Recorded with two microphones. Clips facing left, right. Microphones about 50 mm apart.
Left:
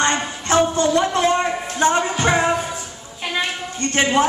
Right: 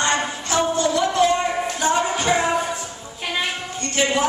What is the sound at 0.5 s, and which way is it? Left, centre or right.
Music, left.